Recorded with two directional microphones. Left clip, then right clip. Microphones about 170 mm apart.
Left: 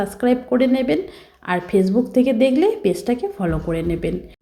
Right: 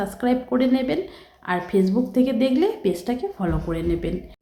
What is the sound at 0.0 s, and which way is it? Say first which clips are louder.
A woman's voice: left 4 dB; 15° left (ahead or behind).